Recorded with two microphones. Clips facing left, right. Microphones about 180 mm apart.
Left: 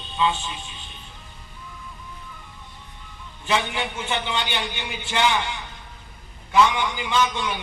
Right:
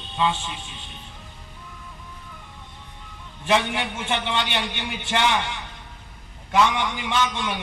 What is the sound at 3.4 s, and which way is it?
A man's voice, 65° right (ahead or behind).